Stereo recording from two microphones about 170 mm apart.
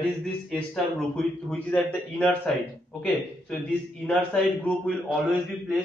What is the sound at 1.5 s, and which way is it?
A man's voice, 5° left (ahead or behind).